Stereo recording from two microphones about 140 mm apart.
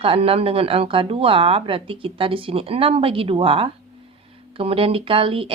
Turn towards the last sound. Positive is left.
turn(degrees=-40)  # may be behind; listen again after turning